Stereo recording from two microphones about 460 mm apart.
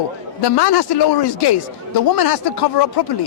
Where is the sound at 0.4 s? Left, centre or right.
Left.